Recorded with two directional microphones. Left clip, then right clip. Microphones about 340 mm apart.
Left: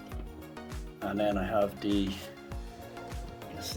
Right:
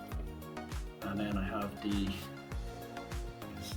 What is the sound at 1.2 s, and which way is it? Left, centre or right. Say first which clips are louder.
Speech: left 11 dB; centre.